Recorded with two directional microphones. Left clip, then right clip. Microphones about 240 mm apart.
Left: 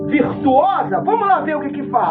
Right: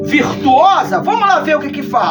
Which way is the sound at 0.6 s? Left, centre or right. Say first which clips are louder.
Right 6 dB; right.